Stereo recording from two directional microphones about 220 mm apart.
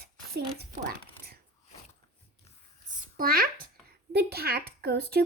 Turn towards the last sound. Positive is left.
turn(degrees=-45)  # may be behind; listen again after turning